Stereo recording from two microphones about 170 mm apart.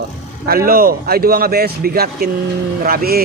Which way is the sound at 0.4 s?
60° right (ahead or behind).